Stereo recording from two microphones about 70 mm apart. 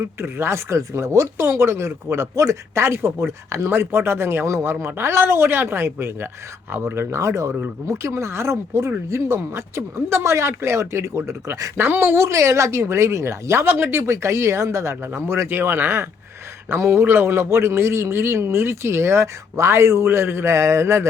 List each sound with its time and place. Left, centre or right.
0.0 s a man's voice: right